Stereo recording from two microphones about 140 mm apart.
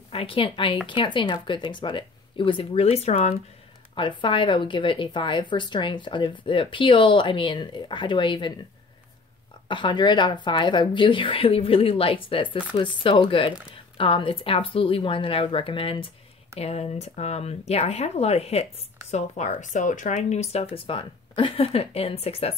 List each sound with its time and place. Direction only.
0.1 s speech: 40° left (ahead or behind)
3.9 s speech: 35° left (ahead or behind)
9.7 s speech: 35° left (ahead or behind)